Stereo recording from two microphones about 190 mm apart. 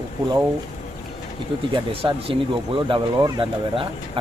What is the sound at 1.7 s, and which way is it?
Speech, 30° right (ahead or behind).